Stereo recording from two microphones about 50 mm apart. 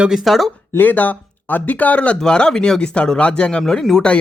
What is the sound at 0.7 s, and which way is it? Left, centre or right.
Speech, left.